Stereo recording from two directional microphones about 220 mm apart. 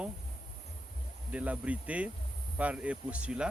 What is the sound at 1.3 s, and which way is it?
Speech, 5° right (ahead or behind).